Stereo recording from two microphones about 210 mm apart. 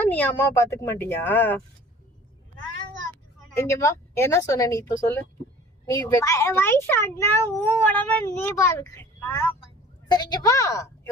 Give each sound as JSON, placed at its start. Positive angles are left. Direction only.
{"t": 0.1, "sound": "speech", "side_deg": 10}
{"t": 3.5, "sound": "speech", "side_deg": 10}